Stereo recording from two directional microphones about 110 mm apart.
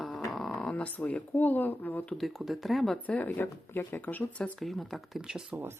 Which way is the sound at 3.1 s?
15° left (ahead or behind).